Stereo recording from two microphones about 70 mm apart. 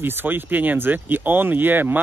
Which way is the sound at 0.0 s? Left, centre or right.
Right.